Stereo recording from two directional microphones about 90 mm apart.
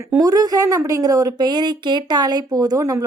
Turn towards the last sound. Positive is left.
turn(degrees=-40)  # may be behind; listen again after turning